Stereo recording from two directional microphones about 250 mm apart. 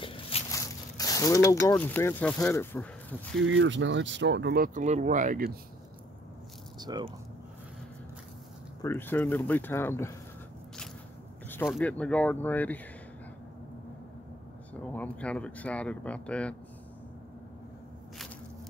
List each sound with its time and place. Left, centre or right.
0.0 s a sound: left
1.7 s speech: centre
3.3 s speech: right
6.8 s speech: centre
8.8 s speech: centre
11.6 s speech: centre
14.8 s speech: centre